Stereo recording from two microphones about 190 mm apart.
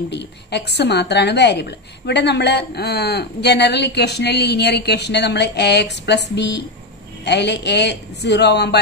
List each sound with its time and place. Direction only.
0.1 s a woman's voice: 65° left (ahead or behind)